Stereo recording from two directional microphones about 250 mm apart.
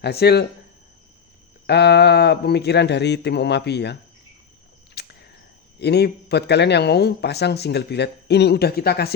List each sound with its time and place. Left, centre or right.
0.0 s speech: left
1.6 s speech: left
4.9 s a sound: left
5.8 s speech: left